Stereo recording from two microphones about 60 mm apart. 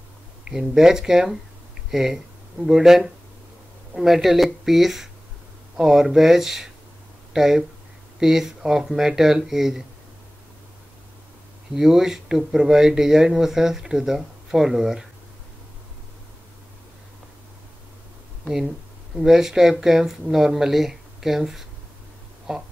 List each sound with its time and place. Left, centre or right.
0.5 s speech: centre
11.7 s speech: centre
19.1 s speech: centre